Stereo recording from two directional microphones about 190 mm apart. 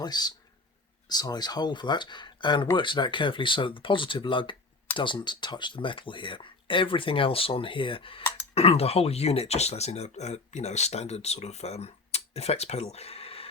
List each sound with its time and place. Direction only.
0.0 s speech: 20° left (ahead or behind)